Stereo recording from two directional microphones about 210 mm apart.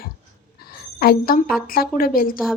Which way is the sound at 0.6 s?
45° left (ahead or behind).